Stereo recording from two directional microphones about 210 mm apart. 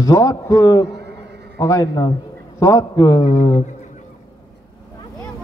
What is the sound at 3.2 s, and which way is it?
Speech, 35° left (ahead or behind).